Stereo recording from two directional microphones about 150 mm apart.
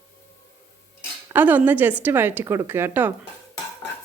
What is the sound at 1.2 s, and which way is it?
A woman's voice, 10° right (ahead or behind).